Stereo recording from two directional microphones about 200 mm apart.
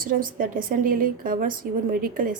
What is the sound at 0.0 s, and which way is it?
A woman's voice, 45° right (ahead or behind).